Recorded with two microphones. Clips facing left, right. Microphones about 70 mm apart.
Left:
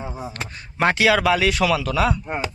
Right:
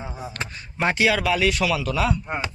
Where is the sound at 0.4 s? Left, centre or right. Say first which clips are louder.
Right 1 dB; left.